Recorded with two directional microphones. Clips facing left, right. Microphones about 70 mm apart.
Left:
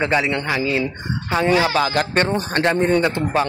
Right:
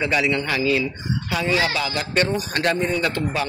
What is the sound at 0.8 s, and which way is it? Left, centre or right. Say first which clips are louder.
Speech: left 1 dB; left.